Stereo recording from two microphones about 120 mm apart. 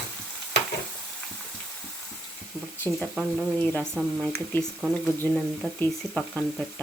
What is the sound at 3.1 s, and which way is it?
Speech, 5° right (ahead or behind).